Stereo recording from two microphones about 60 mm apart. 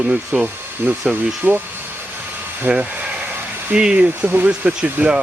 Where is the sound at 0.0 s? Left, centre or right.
Right.